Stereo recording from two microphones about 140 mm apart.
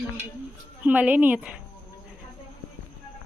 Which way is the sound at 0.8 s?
10° right (ahead or behind).